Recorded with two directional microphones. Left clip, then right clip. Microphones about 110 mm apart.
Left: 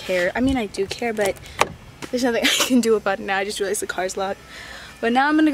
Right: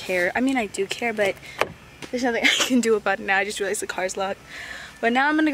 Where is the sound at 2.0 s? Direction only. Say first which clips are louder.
Left 1 dB; 10° left (ahead or behind).